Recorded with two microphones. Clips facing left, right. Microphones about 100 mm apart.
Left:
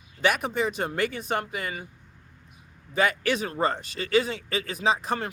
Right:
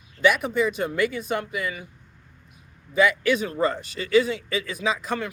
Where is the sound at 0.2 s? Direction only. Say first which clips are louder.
Right 4 dB; 45° left (ahead or behind).